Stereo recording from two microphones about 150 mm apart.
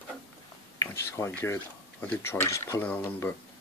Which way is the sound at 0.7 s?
20° left (ahead or behind).